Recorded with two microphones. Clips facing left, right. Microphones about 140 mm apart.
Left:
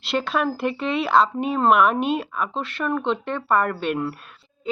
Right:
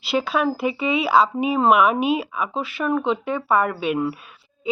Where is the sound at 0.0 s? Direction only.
Centre (ahead or behind).